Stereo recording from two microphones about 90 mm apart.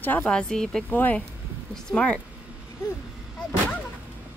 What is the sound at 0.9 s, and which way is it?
Speech, 20° left (ahead or behind).